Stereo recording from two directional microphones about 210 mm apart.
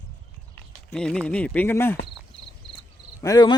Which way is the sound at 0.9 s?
5° left (ahead or behind).